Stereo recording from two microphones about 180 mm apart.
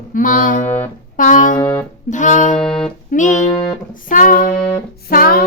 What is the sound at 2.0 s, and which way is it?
A woman's voice, 45° left (ahead or behind).